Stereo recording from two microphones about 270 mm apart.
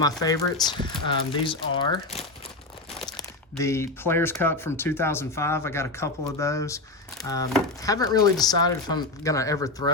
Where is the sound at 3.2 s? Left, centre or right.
Centre.